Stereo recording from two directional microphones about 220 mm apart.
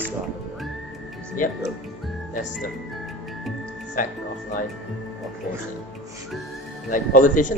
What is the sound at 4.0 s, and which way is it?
Speech, 35° left (ahead or behind).